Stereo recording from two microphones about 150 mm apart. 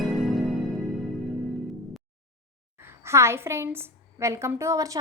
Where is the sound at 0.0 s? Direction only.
Centre (ahead or behind).